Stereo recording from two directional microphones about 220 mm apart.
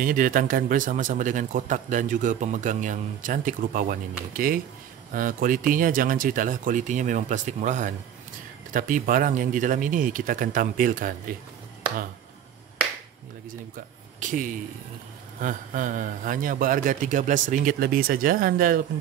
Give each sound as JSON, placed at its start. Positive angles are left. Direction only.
{"t": 0.0, "sound": "speech", "side_deg": -40}
{"t": 14.2, "sound": "speech", "side_deg": -35}